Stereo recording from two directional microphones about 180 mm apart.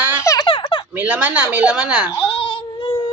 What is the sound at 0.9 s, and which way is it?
A man's voice, 10° right (ahead or behind).